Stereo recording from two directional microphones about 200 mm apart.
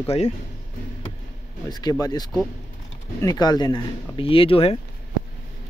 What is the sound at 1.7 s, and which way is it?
Speech, 20° left (ahead or behind).